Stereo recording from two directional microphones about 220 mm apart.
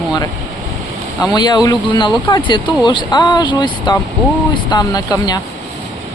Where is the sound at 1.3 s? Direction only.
20° left (ahead or behind).